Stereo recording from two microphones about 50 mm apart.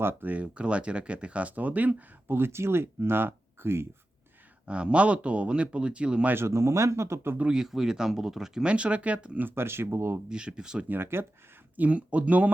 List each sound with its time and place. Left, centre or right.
0.0 s speech: right
0.3 s speech: right
2.2 s speech: right
4.6 s speech: right
6.3 s speech: right
7.5 s speech: centre
8.6 s speech: right
9.4 s speech: right
10.2 s speech: centre
10.8 s speech: right
11.8 s speech: right